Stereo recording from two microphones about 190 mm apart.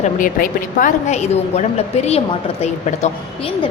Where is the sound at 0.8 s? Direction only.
40° left (ahead or behind).